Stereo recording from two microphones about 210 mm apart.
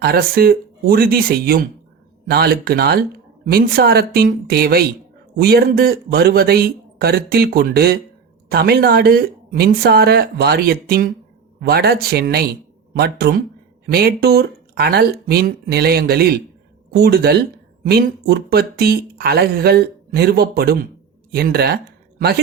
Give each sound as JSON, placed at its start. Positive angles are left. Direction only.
{"t": 0.0, "sound": "speech", "side_deg": -45}